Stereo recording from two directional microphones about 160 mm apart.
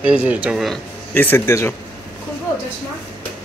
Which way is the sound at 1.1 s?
10° left (ahead or behind).